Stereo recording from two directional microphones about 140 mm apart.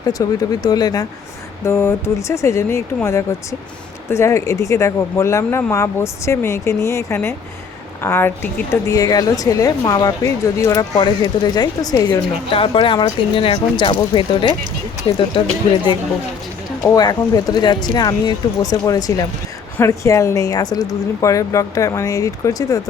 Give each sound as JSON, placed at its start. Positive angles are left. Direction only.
{"t": 0.1, "sound": "speech", "side_deg": 25}
{"t": 1.6, "sound": "speech", "side_deg": 20}
{"t": 12.5, "sound": "speech", "side_deg": 40}
{"t": 16.9, "sound": "speech", "side_deg": 25}